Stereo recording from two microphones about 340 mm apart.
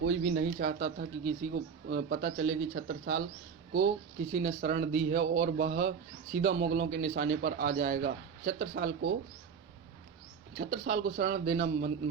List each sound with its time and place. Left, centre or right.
0.0 s a man's voice: right
4.3 s a man's voice: right
10.6 s a man's voice: right